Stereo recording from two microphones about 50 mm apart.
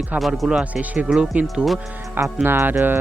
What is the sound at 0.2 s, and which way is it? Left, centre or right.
Speech, centre.